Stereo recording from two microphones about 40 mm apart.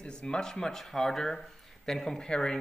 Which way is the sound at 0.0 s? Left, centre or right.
Left.